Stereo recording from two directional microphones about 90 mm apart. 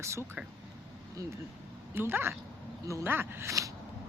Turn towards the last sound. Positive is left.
turn(degrees=-35)  # may be behind; listen again after turning